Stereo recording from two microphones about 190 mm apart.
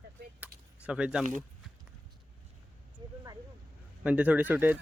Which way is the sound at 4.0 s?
5° right (ahead or behind).